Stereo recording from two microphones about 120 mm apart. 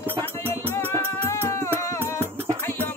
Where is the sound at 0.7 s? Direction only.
20° left (ahead or behind).